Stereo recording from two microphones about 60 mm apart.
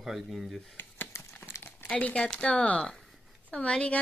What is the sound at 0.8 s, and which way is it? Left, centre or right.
Crumpling, left.